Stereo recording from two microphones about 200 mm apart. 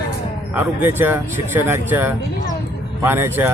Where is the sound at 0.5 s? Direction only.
10° right (ahead or behind).